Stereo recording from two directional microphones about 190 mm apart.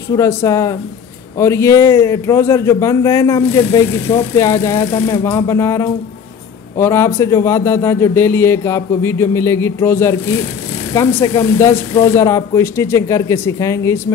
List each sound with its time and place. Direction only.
0.1 s speech: 15° left (ahead or behind)